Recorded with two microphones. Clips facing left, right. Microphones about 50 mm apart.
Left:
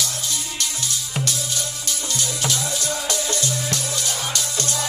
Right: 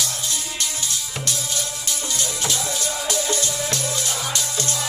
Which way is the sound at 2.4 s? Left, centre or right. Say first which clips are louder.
Left 1 dB; right.